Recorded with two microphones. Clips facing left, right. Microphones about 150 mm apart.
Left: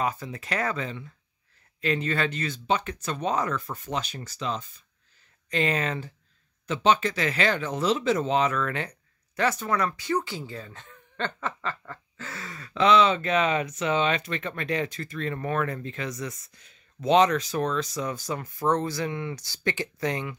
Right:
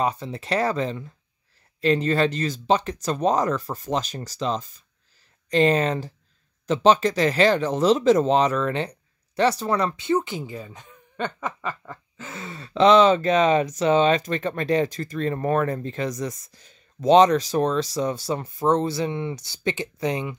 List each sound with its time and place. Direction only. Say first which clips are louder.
0.0 s speech: right 4 dB; 30° right (ahead or behind)